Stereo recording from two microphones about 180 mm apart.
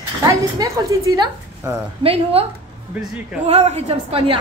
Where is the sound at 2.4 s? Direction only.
30° right (ahead or behind).